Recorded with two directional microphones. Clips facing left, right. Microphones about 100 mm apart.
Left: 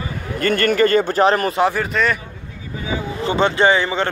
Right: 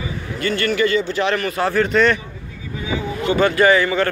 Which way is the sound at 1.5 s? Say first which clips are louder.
Left 3 dB; 15° left (ahead or behind).